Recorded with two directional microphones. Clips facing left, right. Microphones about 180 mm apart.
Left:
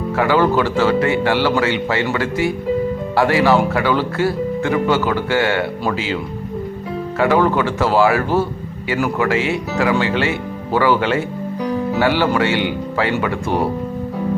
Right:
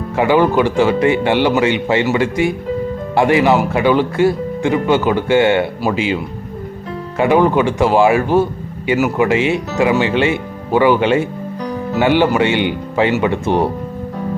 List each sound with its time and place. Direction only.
0.2 s speech: 15° right (ahead or behind)
7.2 s speech: 20° right (ahead or behind)